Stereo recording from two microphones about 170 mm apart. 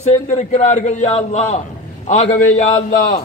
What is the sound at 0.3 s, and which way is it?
A man's voice, 45° left (ahead or behind).